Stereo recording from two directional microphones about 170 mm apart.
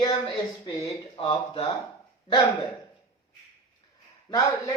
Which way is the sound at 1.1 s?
30° left (ahead or behind).